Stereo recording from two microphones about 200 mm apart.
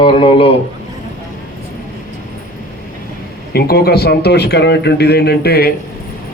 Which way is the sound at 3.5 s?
50° left (ahead or behind).